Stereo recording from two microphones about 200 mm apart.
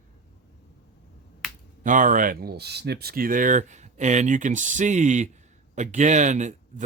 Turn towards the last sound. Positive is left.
turn(degrees=-35)  # may be behind; listen again after turning